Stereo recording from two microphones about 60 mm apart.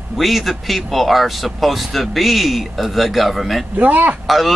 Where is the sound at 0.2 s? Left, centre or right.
Centre.